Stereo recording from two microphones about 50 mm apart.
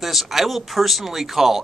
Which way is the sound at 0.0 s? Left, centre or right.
Centre.